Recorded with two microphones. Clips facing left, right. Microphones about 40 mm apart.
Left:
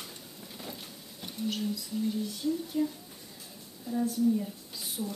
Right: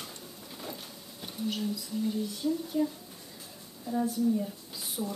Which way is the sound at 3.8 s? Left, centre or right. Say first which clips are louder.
Right 1 dB; centre.